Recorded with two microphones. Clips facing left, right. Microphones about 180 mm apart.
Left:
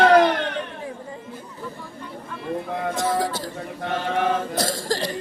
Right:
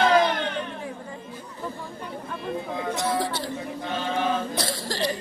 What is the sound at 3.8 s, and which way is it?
Chant, 65° left (ahead or behind).